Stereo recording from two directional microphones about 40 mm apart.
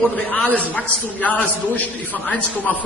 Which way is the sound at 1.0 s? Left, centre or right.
Left.